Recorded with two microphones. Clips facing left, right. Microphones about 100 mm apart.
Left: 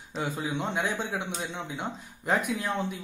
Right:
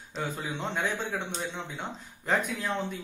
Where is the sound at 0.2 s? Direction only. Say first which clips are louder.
Left 2 dB; 15° left (ahead or behind).